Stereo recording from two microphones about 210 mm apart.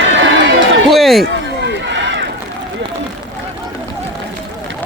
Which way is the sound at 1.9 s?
60° right (ahead or behind).